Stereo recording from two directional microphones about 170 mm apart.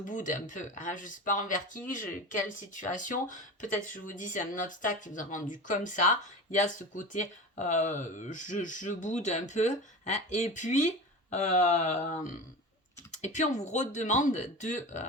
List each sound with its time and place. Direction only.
0.0 s speech: 50° left (ahead or behind)